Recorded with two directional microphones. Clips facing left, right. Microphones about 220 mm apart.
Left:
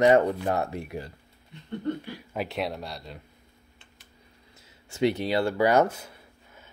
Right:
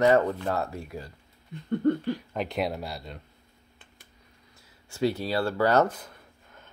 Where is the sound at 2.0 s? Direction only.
10° left (ahead or behind).